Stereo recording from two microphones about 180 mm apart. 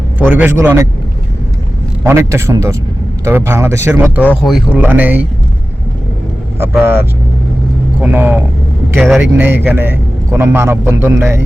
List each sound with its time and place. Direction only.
0.2 s a man's voice: 10° right (ahead or behind)
2.0 s a man's voice: 15° right (ahead or behind)
4.4 s a man's voice: centre (ahead or behind)
6.7 s a man's voice: 10° right (ahead or behind)
9.0 s speech: centre (ahead or behind)
9.4 s a man's voice: 10° right (ahead or behind)